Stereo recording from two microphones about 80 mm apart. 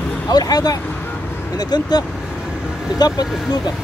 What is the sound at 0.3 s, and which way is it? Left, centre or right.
Speech, left.